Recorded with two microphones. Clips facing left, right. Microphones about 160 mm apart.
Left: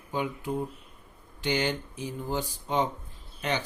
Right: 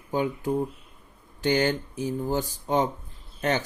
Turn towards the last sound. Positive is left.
turn(degrees=-45)  # may be behind; listen again after turning